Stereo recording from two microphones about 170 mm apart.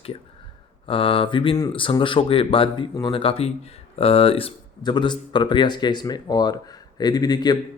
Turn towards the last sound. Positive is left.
turn(degrees=25)  # may be behind; listen again after turning